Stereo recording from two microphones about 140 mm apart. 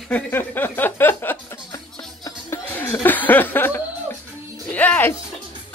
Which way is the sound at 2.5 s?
15° left (ahead or behind).